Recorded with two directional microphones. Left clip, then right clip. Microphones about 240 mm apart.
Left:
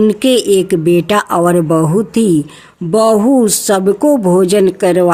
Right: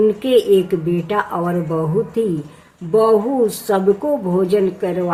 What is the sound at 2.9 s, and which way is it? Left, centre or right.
A woman's voice, left.